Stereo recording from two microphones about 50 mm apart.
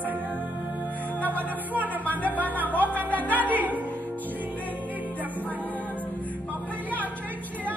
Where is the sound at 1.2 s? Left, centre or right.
Right.